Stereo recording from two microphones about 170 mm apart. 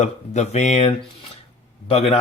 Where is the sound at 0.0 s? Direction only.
40° left (ahead or behind).